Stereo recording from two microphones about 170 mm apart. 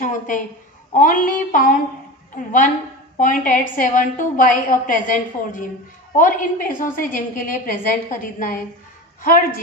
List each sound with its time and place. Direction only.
0.9 s a woman's voice: 55° left (ahead or behind)